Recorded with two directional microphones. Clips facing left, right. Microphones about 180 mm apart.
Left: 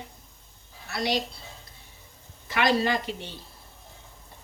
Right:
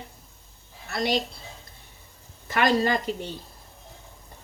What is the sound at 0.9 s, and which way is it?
Speech, 50° right (ahead or behind).